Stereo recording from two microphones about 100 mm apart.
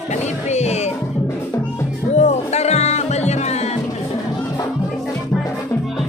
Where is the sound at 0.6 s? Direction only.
90° left.